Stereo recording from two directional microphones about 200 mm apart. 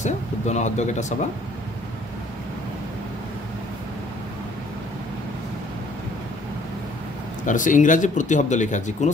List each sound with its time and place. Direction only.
0.0 s speech: 35° left (ahead or behind)
7.4 s speech: 40° left (ahead or behind)